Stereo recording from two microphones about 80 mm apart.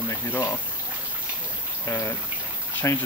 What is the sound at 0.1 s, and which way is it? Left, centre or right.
Speech, left.